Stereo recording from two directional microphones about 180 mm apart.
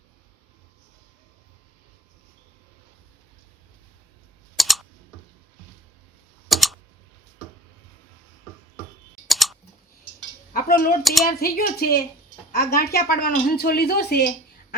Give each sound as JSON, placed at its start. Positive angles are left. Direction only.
{"t": 4.5, "sound": "typing", "side_deg": 0}
{"t": 6.5, "sound": "typing", "side_deg": 0}
{"t": 9.3, "sound": "clicking", "side_deg": 0}
{"t": 10.5, "sound": "speech", "side_deg": 55}
{"t": 11.0, "sound": "speech", "side_deg": 0}
{"t": 11.3, "sound": "a woman's voice", "side_deg": 55}